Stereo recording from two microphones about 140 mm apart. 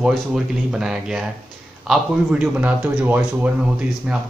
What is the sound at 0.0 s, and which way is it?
Speech, 5° right (ahead or behind).